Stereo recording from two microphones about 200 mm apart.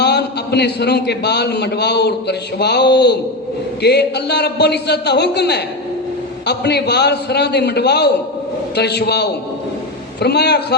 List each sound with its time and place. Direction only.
0.0 s a man's voice: 55° left (ahead or behind)